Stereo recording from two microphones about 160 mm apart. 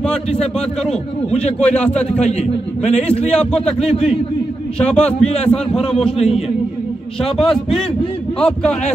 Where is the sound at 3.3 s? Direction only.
5° left (ahead or behind).